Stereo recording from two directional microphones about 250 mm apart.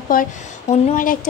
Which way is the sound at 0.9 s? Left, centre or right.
Left.